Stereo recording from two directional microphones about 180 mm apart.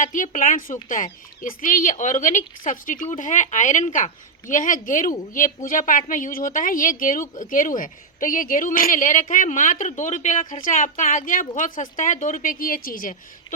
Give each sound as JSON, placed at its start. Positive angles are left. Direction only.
{"t": 0.0, "sound": "speech", "side_deg": 45}